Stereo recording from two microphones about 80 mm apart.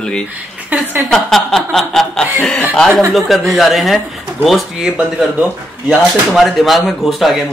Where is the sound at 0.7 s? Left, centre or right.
Centre.